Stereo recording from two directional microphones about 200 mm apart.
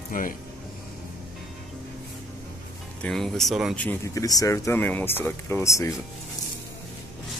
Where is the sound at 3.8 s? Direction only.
15° left (ahead or behind).